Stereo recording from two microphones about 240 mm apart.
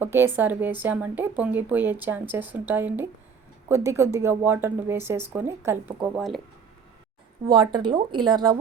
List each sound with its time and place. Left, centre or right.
0.0 s a woman's voice: centre
7.4 s a woman's voice: right